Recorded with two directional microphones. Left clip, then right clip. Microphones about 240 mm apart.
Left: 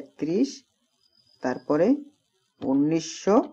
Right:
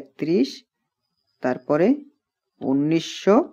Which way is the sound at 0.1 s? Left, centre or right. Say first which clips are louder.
Right 4 dB; right.